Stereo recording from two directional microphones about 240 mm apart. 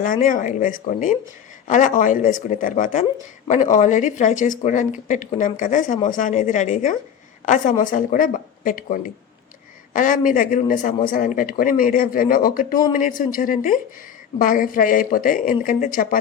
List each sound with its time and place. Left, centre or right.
0.0 s speech: left